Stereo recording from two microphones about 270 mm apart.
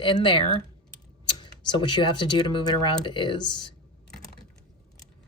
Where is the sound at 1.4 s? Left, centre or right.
Centre.